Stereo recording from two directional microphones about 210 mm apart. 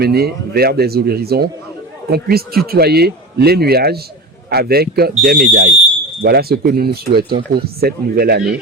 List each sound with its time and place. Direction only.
0.0 s speech: 50° right (ahead or behind)